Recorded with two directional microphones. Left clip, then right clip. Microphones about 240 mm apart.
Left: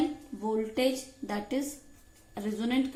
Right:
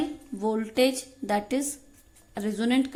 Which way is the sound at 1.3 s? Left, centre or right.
Right.